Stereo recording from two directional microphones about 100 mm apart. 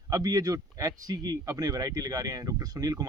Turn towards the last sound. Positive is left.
turn(degrees=-35)  # may be behind; listen again after turning